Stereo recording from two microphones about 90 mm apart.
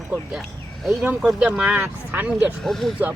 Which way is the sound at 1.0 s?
15° right (ahead or behind).